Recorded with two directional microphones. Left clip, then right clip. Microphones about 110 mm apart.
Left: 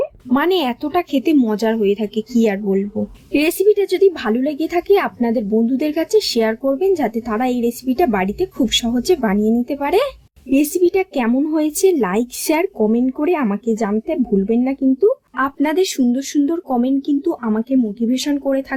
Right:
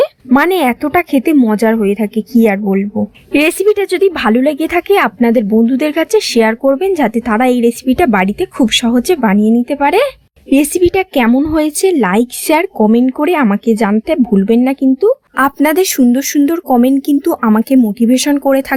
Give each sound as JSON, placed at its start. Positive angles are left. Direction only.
{"t": 0.3, "sound": "a woman's voice", "side_deg": -25}
{"t": 15.4, "sound": "speech", "side_deg": -40}